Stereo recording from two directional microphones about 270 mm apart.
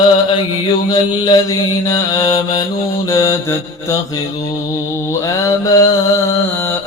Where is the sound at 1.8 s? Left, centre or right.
Centre.